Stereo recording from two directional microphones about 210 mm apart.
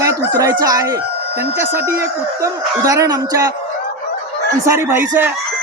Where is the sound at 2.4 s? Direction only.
15° right (ahead or behind).